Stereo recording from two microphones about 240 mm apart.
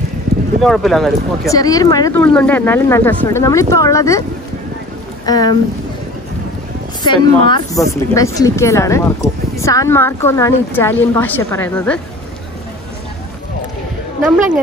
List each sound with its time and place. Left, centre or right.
0.6 s speech: centre
1.5 s a woman's voice: centre
5.2 s speech: centre
7.0 s a woman's voice: centre